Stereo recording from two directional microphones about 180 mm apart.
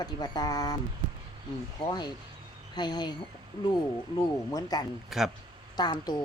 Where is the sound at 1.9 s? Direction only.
25° left (ahead or behind).